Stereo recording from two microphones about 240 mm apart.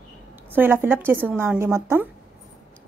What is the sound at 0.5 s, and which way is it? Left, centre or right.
A woman's voice, centre.